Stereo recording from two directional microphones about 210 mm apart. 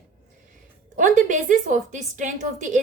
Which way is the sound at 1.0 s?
35° right (ahead or behind).